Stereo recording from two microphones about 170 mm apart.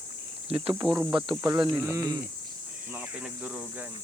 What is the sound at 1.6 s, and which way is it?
Speech, 10° right (ahead or behind).